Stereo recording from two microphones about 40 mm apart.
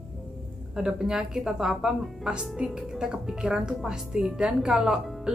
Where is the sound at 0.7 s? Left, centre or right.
Centre.